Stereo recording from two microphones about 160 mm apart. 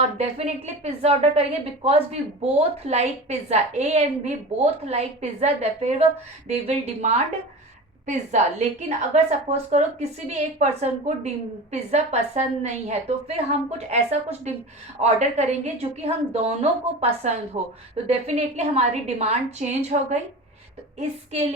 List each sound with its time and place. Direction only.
0.2 s a woman's voice: 40° right (ahead or behind)